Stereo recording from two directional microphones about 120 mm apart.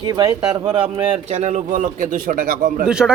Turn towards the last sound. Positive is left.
turn(degrees=-5)  # may be behind; listen again after turning